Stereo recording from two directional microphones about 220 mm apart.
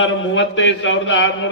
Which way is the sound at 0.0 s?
60° left (ahead or behind).